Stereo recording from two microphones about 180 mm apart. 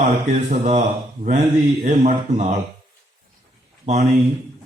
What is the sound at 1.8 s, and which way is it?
Speech, 40° right (ahead or behind).